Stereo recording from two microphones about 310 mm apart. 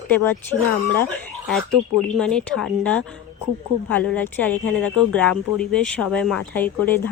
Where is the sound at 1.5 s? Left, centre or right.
Centre.